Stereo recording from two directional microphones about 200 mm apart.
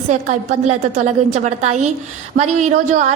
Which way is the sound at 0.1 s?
35° right (ahead or behind).